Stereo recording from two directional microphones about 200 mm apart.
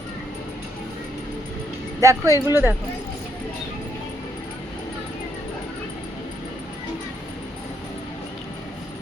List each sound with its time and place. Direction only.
2.0 s speech: 15° right (ahead or behind)